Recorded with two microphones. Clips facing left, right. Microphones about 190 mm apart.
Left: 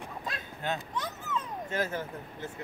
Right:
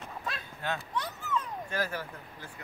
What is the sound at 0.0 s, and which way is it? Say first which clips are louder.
Dog: left 1 dB; 15° left (ahead or behind).